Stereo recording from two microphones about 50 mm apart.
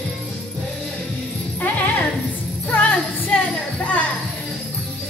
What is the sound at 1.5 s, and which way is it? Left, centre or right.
Music, left.